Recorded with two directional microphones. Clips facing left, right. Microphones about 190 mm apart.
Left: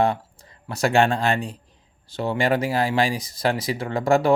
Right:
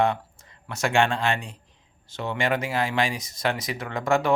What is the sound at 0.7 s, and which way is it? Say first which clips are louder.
Speech: left 4 dB; 35° left (ahead or behind).